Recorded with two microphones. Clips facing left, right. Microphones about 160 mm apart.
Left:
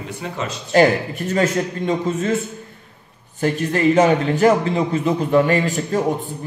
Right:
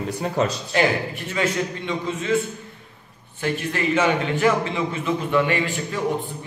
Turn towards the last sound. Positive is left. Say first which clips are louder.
# left 5 dB
turn(degrees=40)  # may be behind; listen again after turning